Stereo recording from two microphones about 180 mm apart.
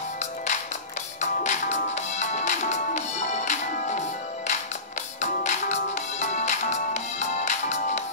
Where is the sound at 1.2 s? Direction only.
40° left (ahead or behind).